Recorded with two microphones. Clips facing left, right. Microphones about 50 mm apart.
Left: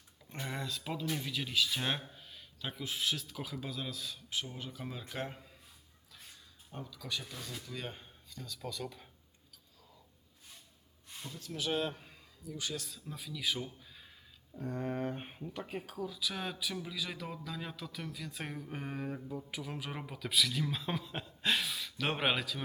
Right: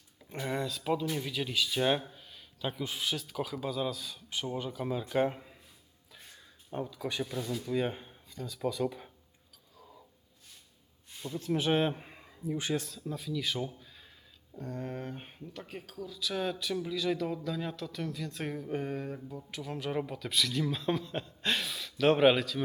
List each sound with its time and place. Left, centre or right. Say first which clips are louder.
0.2 s speech: right 6 dB; centre
5.2 s a man's voice: right 11 dB; centre
6.7 s a man's voice: right 7 dB; right
7.3 s speech: right 10 dB; centre
11.3 s a man's voice: right 8 dB; right
13.1 s speech: right 2 dB; centre